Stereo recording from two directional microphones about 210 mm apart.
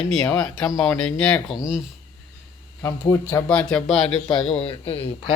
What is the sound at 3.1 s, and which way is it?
Speech, 10° left (ahead or behind).